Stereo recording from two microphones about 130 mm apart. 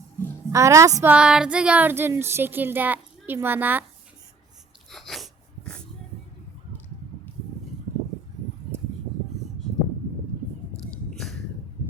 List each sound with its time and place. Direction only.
0.5 s a woman's voice: 25° right (ahead or behind)
1.0 s speech: 5° right (ahead or behind)
4.9 s wheeze: centre (ahead or behind)